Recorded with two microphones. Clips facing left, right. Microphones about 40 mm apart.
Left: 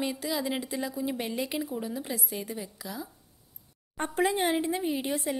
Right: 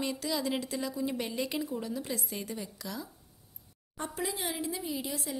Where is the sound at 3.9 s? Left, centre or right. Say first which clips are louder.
Left 9 dB; left.